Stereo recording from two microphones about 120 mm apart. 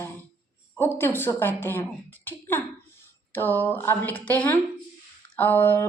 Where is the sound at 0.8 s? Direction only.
20° left (ahead or behind).